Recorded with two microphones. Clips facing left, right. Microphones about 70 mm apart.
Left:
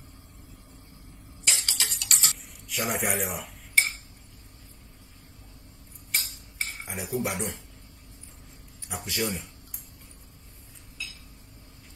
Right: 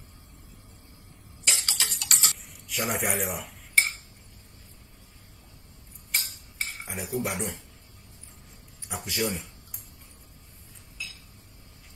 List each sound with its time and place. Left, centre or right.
1.4 s tick-tock: right
2.0 s a sound: right
2.7 s cutlery: centre
6.1 s cutlery: centre
7.2 s a man's voice: centre
8.8 s speech: centre
11.0 s cutlery: centre